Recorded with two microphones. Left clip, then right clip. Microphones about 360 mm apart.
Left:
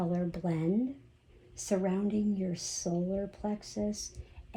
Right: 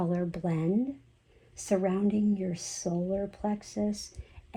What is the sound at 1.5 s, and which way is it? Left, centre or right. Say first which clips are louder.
Speech: right 3 dB; right.